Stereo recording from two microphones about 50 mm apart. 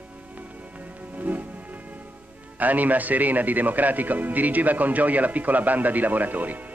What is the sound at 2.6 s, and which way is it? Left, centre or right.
Speech, right.